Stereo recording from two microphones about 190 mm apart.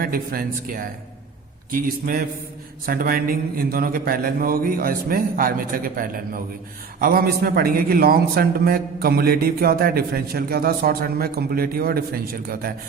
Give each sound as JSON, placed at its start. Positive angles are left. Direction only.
{"t": 0.0, "sound": "a man's voice", "side_deg": -50}